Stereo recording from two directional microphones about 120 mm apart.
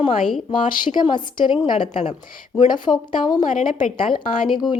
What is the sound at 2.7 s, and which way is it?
Speech, 40° left (ahead or behind).